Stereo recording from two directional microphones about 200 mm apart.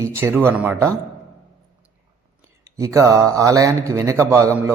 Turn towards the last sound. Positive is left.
turn(degrees=-15)  # may be behind; listen again after turning